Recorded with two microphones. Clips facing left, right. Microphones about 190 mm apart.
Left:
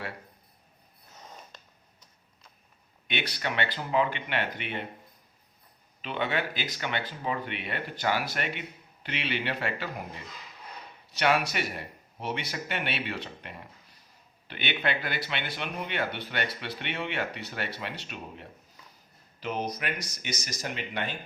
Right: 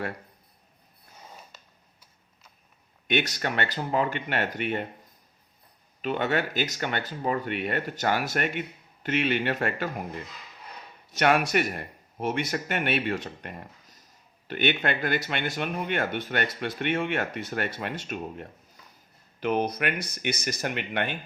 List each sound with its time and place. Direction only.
3.1 s speech: 45° right (ahead or behind)
6.0 s speech: 45° right (ahead or behind); by 21.2 s 60° right (ahead or behind)